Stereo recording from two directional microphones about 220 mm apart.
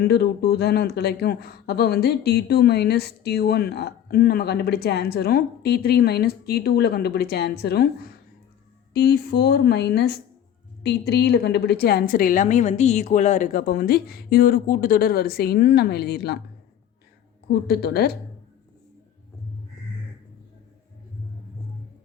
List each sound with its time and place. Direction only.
0.0 s speech: 45° left (ahead or behind)
17.5 s speech: 45° left (ahead or behind)